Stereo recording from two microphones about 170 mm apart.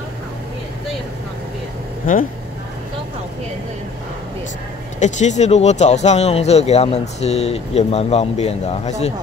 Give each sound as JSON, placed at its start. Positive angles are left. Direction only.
{"t": 5.0, "sound": "speech", "side_deg": 45}